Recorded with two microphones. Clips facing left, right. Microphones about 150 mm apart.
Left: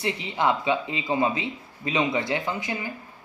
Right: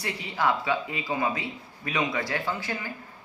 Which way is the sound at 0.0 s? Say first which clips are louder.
Left 3 dB; 20° left (ahead or behind).